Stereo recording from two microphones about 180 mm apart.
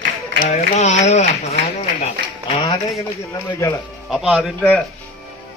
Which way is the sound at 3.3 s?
20° left (ahead or behind).